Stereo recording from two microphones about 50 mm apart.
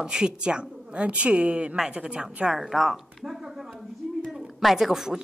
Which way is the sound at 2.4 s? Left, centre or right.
Centre.